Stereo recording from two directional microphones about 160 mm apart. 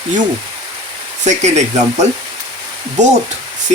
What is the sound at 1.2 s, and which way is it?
Speech, 45° right (ahead or behind).